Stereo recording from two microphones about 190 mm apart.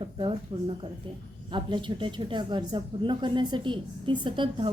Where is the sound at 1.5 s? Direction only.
25° right (ahead or behind).